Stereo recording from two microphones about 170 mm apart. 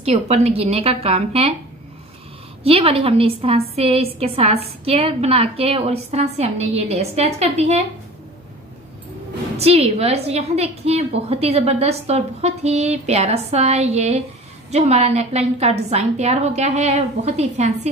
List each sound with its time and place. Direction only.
0.0 s a woman's voice: 40° right (ahead or behind)
2.6 s a woman's voice: 35° right (ahead or behind)
9.6 s a woman's voice: 35° right (ahead or behind)